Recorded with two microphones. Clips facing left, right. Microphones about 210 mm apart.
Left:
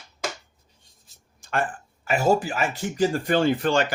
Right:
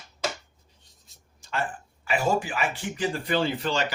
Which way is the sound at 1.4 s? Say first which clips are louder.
Left 4 dB; 50° left (ahead or behind).